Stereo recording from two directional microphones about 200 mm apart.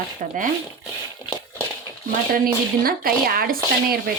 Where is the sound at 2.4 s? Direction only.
45° right (ahead or behind).